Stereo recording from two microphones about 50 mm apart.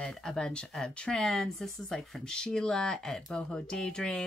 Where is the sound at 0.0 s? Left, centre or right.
Centre.